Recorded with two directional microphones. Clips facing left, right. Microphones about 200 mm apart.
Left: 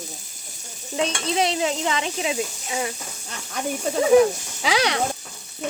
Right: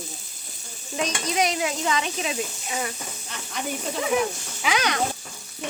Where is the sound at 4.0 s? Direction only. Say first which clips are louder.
Left 10 dB; 30° left (ahead or behind).